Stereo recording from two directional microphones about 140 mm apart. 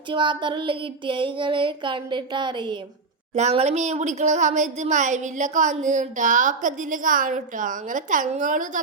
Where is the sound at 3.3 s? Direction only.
50° right (ahead or behind).